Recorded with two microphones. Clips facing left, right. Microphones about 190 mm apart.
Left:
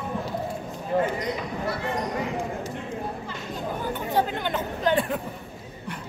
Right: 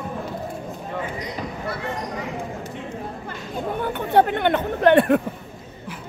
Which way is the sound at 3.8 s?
65° right (ahead or behind).